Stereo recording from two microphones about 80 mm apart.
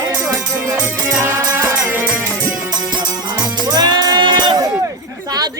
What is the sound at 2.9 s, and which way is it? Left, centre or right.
Music, right.